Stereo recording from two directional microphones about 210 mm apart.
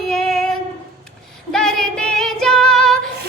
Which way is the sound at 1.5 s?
Centre (ahead or behind).